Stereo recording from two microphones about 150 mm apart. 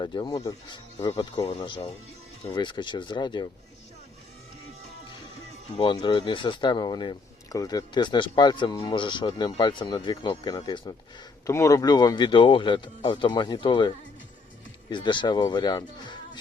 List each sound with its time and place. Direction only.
0.0 s speech: 30° left (ahead or behind)
5.7 s speech: 35° left (ahead or behind)